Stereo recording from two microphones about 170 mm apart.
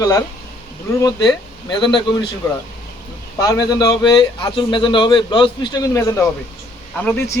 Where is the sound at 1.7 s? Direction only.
30° left (ahead or behind).